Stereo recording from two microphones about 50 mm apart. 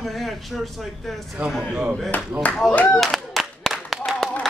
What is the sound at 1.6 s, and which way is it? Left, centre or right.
Speech, centre.